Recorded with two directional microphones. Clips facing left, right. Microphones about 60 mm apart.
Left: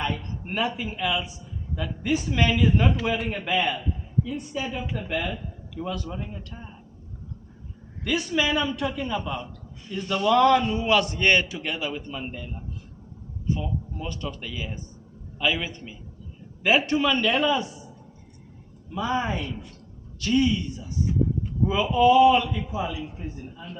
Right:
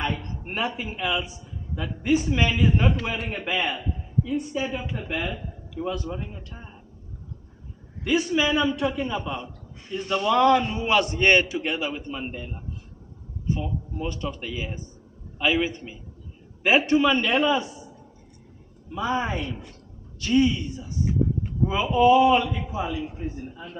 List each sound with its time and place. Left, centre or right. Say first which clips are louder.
0.1 s a man's voice: even; centre
8.0 s a man's voice: right 2 dB; centre
18.9 s a man's voice: even; centre